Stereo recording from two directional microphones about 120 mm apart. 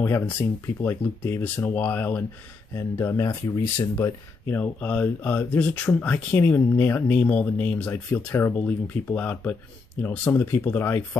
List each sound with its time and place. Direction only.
0.0 s speech: 15° left (ahead or behind)